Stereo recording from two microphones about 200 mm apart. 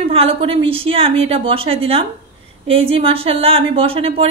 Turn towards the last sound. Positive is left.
turn(degrees=-30)  # may be behind; listen again after turning